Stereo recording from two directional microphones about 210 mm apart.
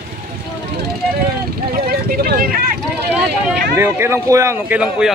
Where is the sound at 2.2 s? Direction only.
45° right (ahead or behind).